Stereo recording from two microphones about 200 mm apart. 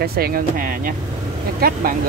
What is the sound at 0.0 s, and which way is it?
Speech, 50° right (ahead or behind).